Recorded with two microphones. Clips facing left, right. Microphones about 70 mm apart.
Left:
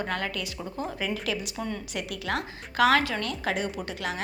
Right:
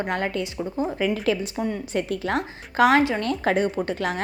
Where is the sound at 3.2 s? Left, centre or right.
Right.